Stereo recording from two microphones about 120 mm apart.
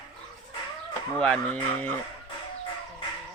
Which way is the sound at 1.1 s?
10° left (ahead or behind).